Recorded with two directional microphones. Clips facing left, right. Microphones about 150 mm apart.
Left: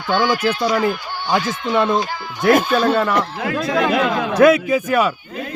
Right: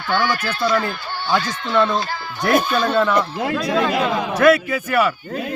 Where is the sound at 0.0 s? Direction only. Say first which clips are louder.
Left 3 dB; 15° left (ahead or behind).